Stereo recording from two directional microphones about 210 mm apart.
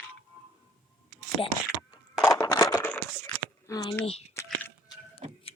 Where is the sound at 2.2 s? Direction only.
15° left (ahead or behind).